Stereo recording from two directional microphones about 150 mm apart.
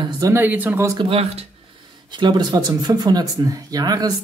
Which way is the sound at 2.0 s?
30° right (ahead or behind).